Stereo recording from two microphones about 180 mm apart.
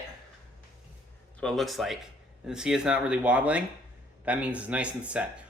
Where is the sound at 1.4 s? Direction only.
5° left (ahead or behind).